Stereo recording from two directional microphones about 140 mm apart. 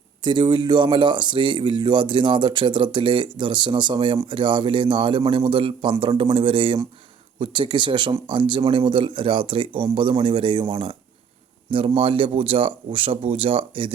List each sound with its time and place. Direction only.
0.2 s speech: 30° right (ahead or behind)